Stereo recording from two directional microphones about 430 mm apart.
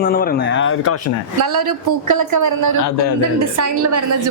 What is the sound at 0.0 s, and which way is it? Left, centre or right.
Speech, centre.